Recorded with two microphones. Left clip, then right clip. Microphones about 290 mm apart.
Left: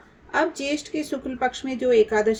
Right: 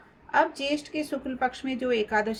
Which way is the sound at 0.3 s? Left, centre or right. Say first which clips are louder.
Left 1 dB; right.